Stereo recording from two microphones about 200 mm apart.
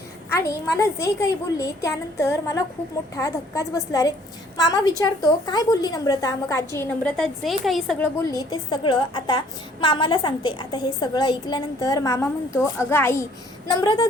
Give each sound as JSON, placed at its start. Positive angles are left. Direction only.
{"t": 0.3, "sound": "a woman's voice", "side_deg": 15}